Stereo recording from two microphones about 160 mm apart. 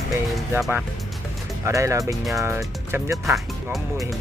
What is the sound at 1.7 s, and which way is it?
Speech, 20° right (ahead or behind).